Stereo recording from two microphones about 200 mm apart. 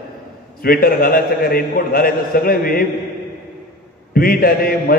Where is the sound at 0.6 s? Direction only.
45° left (ahead or behind).